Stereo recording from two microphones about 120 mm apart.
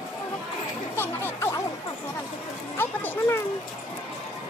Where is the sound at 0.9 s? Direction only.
20° left (ahead or behind).